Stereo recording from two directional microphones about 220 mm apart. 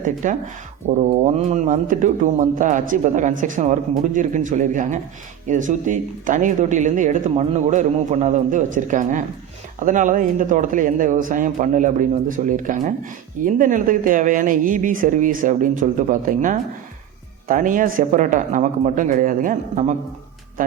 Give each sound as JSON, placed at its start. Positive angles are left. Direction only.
{"t": 0.0, "sound": "speech", "side_deg": -35}